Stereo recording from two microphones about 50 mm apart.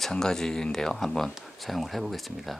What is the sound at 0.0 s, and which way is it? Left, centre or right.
Speech, centre.